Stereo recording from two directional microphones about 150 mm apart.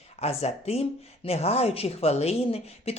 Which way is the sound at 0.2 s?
45° left (ahead or behind).